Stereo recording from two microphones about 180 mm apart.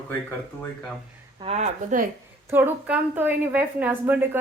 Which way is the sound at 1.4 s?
40° right (ahead or behind).